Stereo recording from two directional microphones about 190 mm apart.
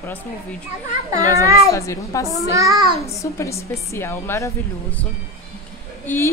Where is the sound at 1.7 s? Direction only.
15° left (ahead or behind).